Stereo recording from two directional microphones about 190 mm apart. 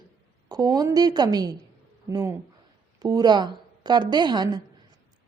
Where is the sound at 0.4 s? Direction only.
20° right (ahead or behind).